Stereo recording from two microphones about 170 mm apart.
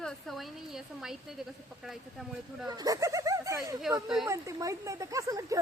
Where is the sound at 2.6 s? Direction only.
20° right (ahead or behind).